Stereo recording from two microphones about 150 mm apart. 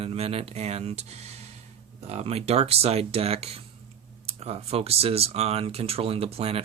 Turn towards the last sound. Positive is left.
turn(degrees=-40)  # may be behind; listen again after turning